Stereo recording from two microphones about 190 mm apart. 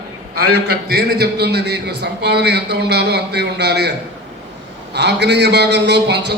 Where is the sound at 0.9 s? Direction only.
55° right (ahead or behind).